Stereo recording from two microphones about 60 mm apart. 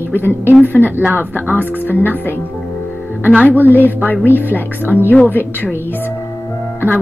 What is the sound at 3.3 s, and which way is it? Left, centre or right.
Speech, right.